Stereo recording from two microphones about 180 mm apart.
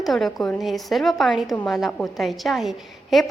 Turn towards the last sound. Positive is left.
turn(degrees=0)  # may be behind; listen again after turning